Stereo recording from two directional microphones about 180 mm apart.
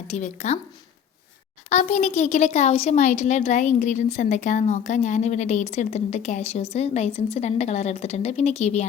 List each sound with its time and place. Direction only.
0.1 s a woman's voice: 40° left (ahead or behind)
1.7 s a woman's voice: 40° left (ahead or behind)